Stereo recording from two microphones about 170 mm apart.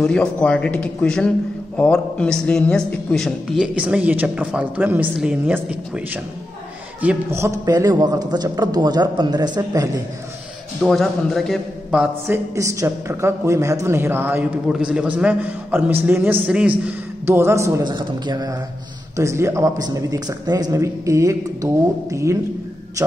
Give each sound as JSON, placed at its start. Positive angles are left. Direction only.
{"t": 0.0, "sound": "a man's voice", "side_deg": 5}
{"t": 10.8, "sound": "a man's voice", "side_deg": 0}
{"t": 12.5, "sound": "a man's voice", "side_deg": -20}